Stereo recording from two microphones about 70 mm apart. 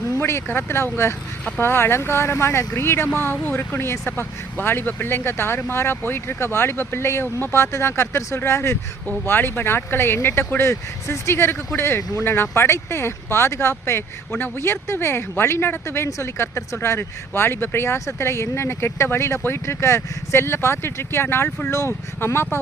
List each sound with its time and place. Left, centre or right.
0.2 s speech: left
9.2 s speech: left
16.0 s speech: left